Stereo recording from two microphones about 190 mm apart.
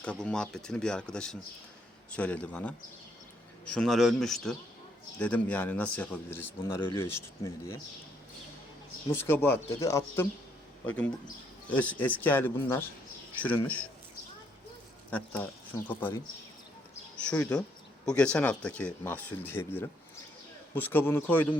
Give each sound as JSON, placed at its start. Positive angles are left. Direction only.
{"t": 0.0, "sound": "a man's voice", "side_deg": 5}
{"t": 3.8, "sound": "a man's voice", "side_deg": 0}
{"t": 9.2, "sound": "a man's voice", "side_deg": 10}
{"t": 11.7, "sound": "a man's voice", "side_deg": 10}
{"t": 15.1, "sound": "a man's voice", "side_deg": 10}
{"t": 17.2, "sound": "a man's voice", "side_deg": 5}